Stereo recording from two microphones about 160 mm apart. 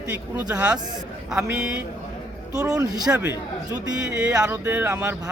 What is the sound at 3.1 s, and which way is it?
Speech, 10° right (ahead or behind).